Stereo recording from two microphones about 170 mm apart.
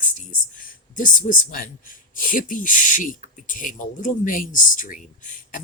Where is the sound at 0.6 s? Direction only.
50° left (ahead or behind).